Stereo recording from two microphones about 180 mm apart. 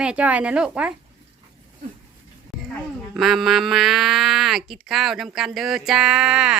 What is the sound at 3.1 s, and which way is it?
Speech, centre (ahead or behind).